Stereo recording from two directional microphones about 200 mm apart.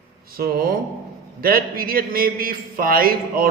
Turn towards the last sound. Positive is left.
turn(degrees=-45)  # may be behind; listen again after turning